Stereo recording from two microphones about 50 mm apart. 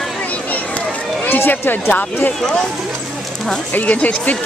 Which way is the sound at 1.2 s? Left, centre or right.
Left.